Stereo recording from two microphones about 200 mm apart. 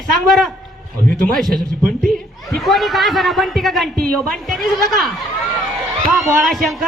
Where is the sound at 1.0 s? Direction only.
Centre (ahead or behind).